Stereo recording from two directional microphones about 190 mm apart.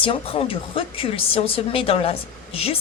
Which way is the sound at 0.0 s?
30° left (ahead or behind).